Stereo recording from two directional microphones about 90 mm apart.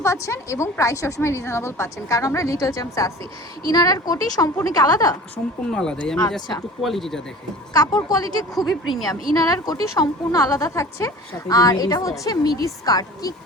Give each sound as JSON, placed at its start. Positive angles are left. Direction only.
{"t": 0.0, "sound": "a woman's voice", "side_deg": 35}
{"t": 5.7, "sound": "speech", "side_deg": 10}
{"t": 7.7, "sound": "a woman's voice", "side_deg": 45}